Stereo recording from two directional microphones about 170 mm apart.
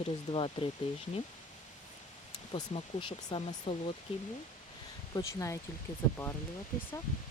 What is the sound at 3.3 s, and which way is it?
Speech, 30° left (ahead or behind).